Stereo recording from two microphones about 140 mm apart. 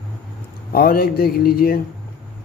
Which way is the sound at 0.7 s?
90° left.